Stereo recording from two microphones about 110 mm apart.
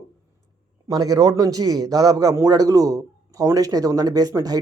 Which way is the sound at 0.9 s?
35° right (ahead or behind).